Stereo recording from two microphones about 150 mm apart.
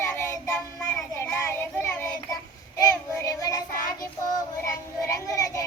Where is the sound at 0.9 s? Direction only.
15° left (ahead or behind).